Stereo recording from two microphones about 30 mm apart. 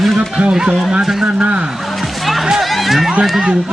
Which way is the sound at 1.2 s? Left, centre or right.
Right.